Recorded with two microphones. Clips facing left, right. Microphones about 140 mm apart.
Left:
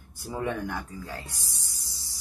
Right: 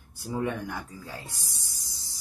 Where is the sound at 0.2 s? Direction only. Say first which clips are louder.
Right 1 dB; centre (ahead or behind).